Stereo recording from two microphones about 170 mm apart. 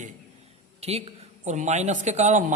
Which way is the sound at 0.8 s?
40° right (ahead or behind).